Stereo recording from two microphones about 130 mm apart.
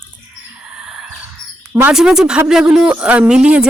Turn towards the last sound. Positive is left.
turn(degrees=-5)  # may be behind; listen again after turning